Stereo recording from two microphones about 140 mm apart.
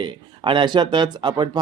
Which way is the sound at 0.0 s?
35° right (ahead or behind).